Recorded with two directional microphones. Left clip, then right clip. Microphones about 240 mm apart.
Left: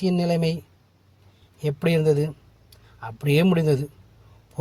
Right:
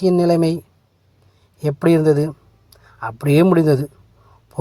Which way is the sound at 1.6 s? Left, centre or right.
Right.